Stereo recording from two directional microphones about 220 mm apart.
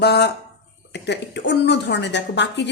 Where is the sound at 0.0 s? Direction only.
50° left (ahead or behind).